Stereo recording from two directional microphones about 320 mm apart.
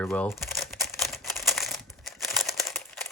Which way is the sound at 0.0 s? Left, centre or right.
Centre.